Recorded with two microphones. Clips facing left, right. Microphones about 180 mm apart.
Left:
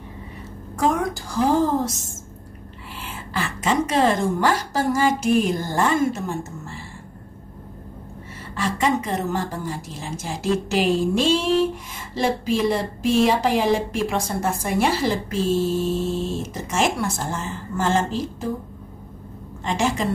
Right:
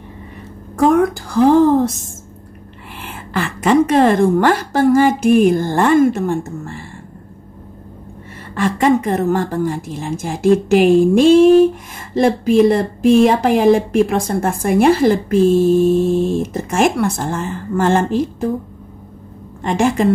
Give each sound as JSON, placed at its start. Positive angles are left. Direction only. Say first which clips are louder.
{"t": 0.7, "sound": "speech", "louder": "right 9 dB", "side_deg": -55}
{"t": 3.0, "sound": "speech", "louder": "right 6 dB", "side_deg": -60}
{"t": 8.5, "sound": "speech", "louder": "right 8 dB", "side_deg": -55}
{"t": 19.6, "sound": "speech", "louder": "right 7 dB", "side_deg": -55}